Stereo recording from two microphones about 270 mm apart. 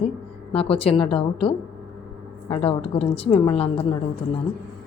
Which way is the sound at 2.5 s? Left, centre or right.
Left.